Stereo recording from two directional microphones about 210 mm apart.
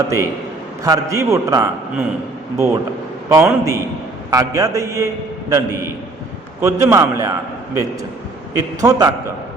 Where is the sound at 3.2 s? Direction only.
15° right (ahead or behind).